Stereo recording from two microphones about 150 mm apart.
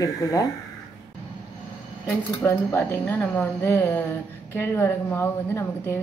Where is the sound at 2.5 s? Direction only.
15° left (ahead or behind).